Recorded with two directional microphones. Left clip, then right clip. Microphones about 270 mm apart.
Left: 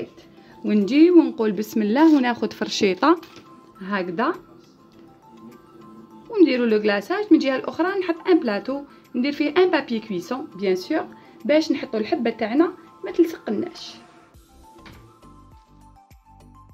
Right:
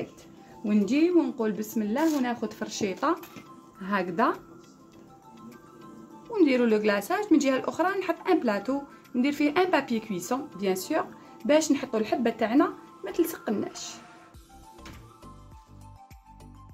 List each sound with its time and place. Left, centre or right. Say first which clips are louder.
0.7 s speech: left 8 dB; left
3.8 s speech: left 2 dB; centre
6.2 s speech: left 5 dB; centre